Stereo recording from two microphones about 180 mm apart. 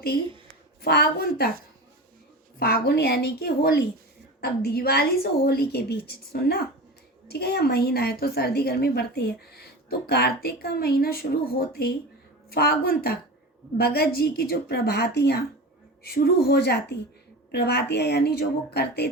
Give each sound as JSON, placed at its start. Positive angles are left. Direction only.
{"t": 0.8, "sound": "a woman's voice", "side_deg": 60}
{"t": 2.6, "sound": "a woman's voice", "side_deg": 60}